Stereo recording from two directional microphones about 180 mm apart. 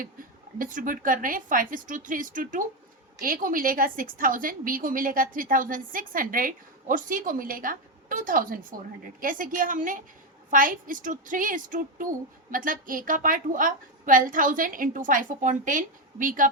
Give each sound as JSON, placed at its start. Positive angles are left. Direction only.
{"t": 0.6, "sound": "a woman's voice", "side_deg": -50}